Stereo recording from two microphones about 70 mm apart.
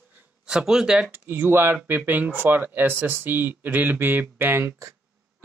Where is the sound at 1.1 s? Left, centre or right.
Right.